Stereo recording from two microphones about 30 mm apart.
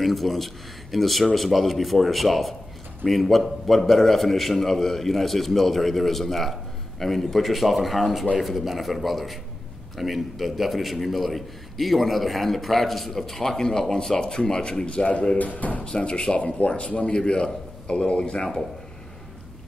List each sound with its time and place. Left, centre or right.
0.0 s a man's voice: centre; by 15.0 s left
15.3 s speech: left
15.8 s a man's voice: left
17.2 s a man's voice: left